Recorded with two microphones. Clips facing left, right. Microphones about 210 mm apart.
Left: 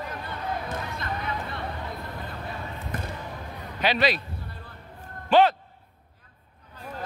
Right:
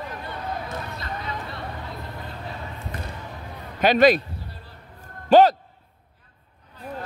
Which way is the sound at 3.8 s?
45° right (ahead or behind).